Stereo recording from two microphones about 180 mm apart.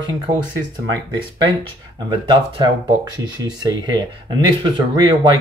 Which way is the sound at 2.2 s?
25° right (ahead or behind).